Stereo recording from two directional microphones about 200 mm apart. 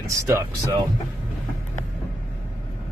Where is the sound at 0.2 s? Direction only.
15° right (ahead or behind).